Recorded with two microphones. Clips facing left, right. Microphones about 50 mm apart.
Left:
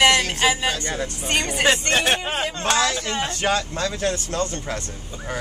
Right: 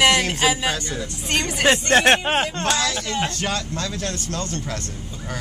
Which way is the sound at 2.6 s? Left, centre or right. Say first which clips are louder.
Left 1 dB; left.